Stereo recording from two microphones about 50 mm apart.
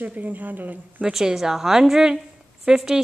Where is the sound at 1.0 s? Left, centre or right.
Centre.